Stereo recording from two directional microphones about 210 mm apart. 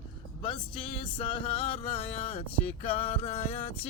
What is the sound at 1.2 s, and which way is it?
Music, 25° left (ahead or behind).